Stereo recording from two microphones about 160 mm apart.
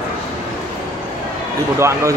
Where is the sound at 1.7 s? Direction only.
15° right (ahead or behind).